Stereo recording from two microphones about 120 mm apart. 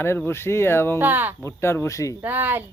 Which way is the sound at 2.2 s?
15° right (ahead or behind).